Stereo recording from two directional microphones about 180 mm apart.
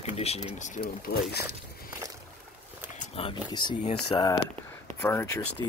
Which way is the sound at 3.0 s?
30° left (ahead or behind).